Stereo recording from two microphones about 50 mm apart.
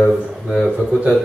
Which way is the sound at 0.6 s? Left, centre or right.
Right.